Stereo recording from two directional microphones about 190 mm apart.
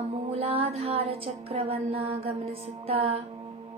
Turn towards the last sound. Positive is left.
turn(degrees=-30)  # may be behind; listen again after turning